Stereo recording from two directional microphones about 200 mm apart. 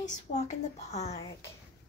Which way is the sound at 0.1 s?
35° left (ahead or behind).